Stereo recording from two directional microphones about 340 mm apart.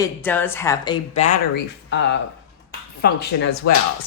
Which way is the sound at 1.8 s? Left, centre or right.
Left.